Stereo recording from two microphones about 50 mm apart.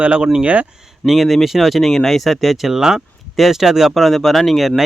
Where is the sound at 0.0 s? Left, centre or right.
Centre.